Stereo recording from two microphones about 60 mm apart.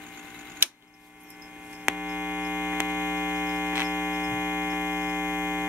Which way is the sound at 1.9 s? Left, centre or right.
Right.